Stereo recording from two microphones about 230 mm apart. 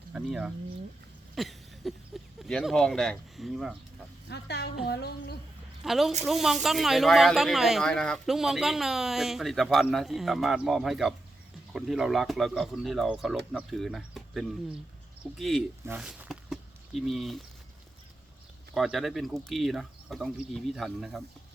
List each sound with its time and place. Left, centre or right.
0.1 s speech: centre
4.3 s speech: left
5.8 s speech: centre
18.7 s speech: centre